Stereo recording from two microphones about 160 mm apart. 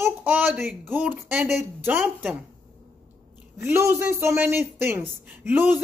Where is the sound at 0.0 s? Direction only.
10° right (ahead or behind).